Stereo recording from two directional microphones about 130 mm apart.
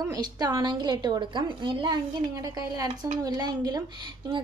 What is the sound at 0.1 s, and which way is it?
A woman's voice, 30° right (ahead or behind).